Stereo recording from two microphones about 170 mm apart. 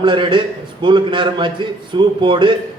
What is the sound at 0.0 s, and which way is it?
A man's voice, 30° right (ahead or behind).